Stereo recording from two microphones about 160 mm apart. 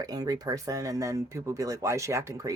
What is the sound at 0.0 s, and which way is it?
Speech, 25° right (ahead or behind).